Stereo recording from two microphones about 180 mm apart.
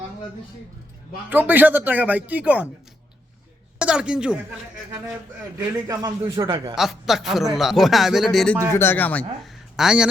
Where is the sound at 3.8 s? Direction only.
5° right (ahead or behind).